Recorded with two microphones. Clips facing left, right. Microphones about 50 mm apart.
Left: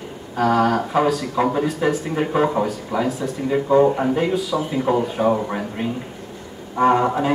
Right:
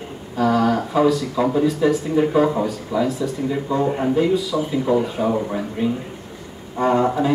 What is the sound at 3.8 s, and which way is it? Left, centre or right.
Speech, centre.